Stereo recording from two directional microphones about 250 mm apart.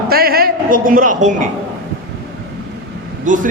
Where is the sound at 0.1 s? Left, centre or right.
Right.